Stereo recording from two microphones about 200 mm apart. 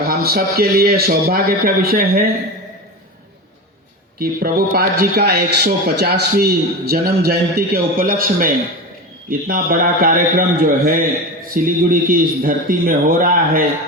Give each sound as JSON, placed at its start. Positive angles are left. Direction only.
{"t": 0.0, "sound": "speech", "side_deg": -50}
{"t": 4.2, "sound": "speech", "side_deg": -45}